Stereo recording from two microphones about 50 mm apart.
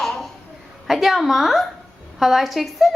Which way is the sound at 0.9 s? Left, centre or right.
Centre.